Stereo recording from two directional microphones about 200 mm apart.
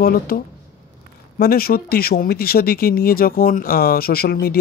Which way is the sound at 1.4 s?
50° left (ahead or behind).